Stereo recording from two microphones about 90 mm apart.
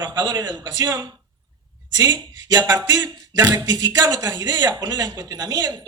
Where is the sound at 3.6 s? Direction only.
40° right (ahead or behind).